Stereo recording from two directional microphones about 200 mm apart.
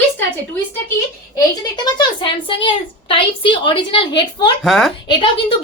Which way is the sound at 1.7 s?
20° left (ahead or behind).